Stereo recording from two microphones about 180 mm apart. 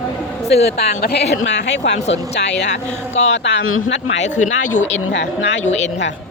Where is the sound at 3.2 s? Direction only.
85° left.